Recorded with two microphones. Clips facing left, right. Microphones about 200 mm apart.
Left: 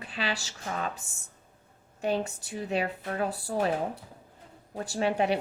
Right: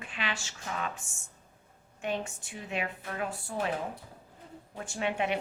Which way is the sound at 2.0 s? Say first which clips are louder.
Left 5 dB; 35° left (ahead or behind).